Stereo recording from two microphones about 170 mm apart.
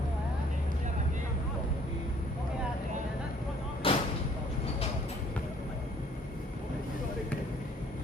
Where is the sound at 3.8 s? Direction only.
30° left (ahead or behind).